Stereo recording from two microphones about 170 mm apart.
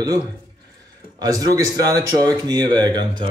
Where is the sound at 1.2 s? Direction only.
20° right (ahead or behind).